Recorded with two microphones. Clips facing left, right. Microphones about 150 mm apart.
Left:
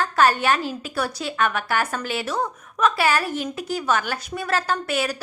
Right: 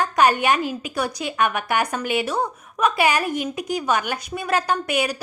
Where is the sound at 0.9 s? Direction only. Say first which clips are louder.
Right 1 dB; 15° right (ahead or behind).